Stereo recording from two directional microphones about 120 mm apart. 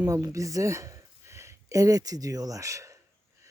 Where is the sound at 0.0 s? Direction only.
30° right (ahead or behind).